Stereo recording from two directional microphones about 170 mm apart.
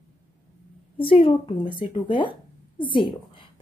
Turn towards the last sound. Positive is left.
turn(degrees=30)  # may be behind; listen again after turning